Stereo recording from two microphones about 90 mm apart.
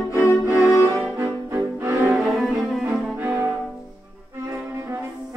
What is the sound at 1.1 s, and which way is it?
Music, 35° right (ahead or behind).